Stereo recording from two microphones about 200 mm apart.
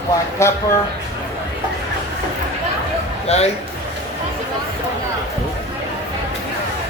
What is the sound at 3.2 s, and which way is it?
Speech, 30° left (ahead or behind).